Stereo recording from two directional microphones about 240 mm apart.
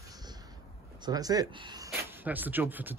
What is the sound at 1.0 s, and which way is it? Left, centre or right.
Speech, centre.